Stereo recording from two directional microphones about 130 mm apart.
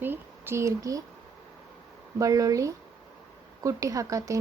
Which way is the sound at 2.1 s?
25° right (ahead or behind).